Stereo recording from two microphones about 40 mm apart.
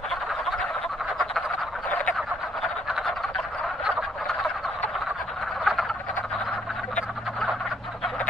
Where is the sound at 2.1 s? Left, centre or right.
Centre.